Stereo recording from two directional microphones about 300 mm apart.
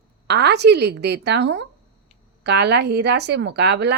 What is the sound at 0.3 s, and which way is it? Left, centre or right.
A woman's voice, right.